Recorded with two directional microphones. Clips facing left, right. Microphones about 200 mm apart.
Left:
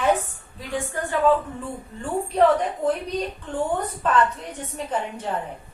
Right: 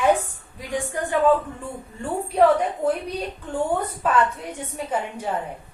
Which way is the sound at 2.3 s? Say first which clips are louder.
Right 1 dB; 10° right (ahead or behind).